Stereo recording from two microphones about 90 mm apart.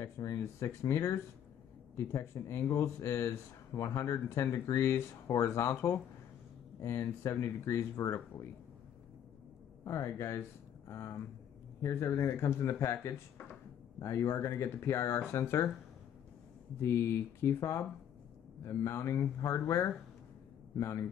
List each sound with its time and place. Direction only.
0.0 s speech: 30° left (ahead or behind)
2.1 s speech: 30° left (ahead or behind)
9.8 s speech: 35° left (ahead or behind)
16.8 s a man's voice: 25° left (ahead or behind)